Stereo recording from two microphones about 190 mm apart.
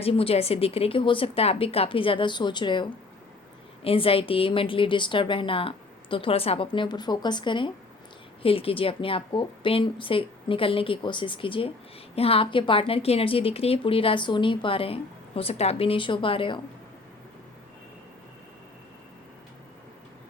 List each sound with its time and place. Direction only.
0.0 s a woman's voice: 30° left (ahead or behind)